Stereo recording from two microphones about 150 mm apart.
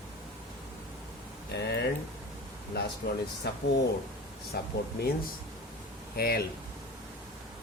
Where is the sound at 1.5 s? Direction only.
90° left.